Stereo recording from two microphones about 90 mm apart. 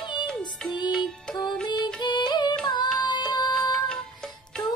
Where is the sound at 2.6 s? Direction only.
50° left (ahead or behind).